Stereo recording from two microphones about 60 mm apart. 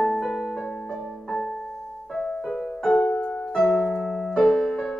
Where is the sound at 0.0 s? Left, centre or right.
Centre.